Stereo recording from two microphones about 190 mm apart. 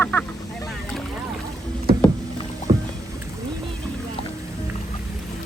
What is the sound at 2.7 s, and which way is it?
Boat, 20° right (ahead or behind).